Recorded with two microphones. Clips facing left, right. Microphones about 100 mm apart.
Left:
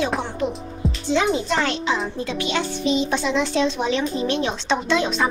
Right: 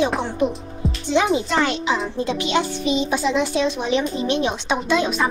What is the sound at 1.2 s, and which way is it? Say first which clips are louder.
Speech: right 2 dB; 5° right (ahead or behind).